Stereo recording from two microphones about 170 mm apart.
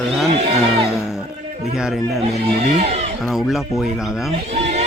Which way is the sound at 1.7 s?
Centre (ahead or behind).